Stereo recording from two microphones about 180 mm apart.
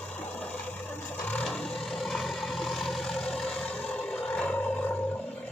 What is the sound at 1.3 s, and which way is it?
Vehicle, 5° left (ahead or behind).